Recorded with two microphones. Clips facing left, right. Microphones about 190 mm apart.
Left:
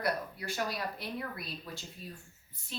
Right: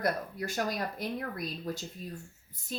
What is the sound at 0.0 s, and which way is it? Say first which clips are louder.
A woman's voice: right 3 dB; 45° right (ahead or behind).